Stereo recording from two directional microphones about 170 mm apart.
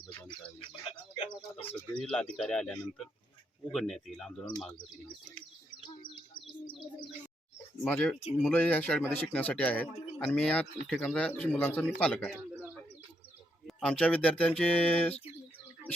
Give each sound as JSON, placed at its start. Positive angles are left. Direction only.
{"t": 1.2, "sound": "speech", "side_deg": 30}
{"t": 2.0, "sound": "speech", "side_deg": 5}
{"t": 7.9, "sound": "a man's voice", "side_deg": 10}
{"t": 13.7, "sound": "a man's voice", "side_deg": 0}